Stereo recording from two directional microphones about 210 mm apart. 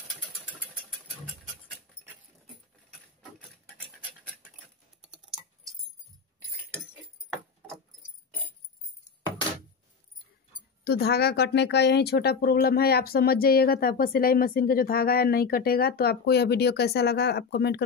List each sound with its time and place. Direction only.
5.0 s typing: centre (ahead or behind)
10.8 s speech: 50° left (ahead or behind)